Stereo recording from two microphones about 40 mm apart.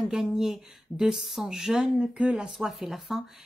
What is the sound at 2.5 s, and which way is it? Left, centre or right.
Speech, centre.